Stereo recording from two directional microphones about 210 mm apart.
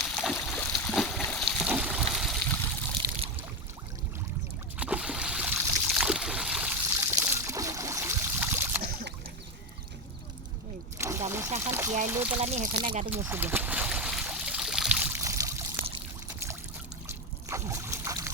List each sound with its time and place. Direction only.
0.2 s a sound: centre (ahead or behind)
4.8 s a sound: 5° right (ahead or behind)
10.9 s boat: 15° right (ahead or behind)
11.3 s water: 15° right (ahead or behind)
12.0 s speech: 10° right (ahead or behind)
12.4 s speech: 30° right (ahead or behind)
13.1 s trickle: 10° right (ahead or behind)
17.1 s boat: 15° right (ahead or behind)